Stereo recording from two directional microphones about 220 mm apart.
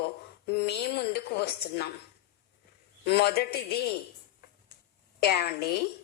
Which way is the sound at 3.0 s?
45° left (ahead or behind).